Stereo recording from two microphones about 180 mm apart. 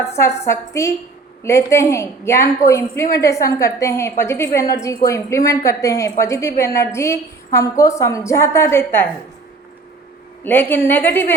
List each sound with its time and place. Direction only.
0.0 s a woman's voice: 15° left (ahead or behind)
10.4 s a woman's voice: 10° left (ahead or behind)